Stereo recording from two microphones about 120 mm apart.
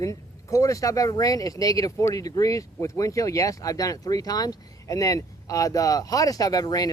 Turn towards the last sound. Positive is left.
turn(degrees=30)  # may be behind; listen again after turning